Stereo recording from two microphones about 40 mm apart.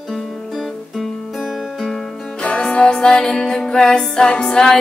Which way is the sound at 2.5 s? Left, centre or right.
Left.